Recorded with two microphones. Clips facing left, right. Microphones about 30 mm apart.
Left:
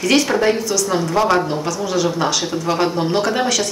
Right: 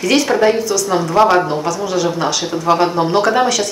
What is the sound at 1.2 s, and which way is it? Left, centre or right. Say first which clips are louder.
Speech: right 5 dB; right.